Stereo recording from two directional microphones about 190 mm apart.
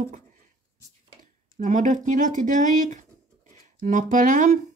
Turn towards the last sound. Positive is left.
turn(degrees=-45)  # may be behind; listen again after turning